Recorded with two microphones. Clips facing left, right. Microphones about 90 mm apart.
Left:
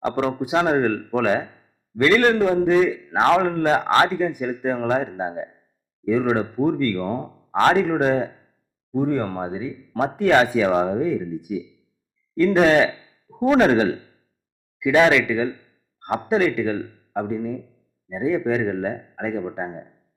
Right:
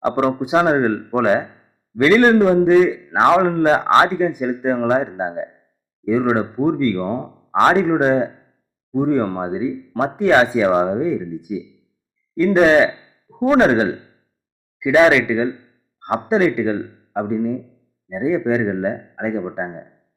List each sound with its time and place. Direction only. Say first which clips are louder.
0.3 s speech: right 4 dB; 20° right (ahead or behind)
14.8 s a sound: right 3 dB; 20° right (ahead or behind)
16.2 s speech: right 3 dB; 20° right (ahead or behind)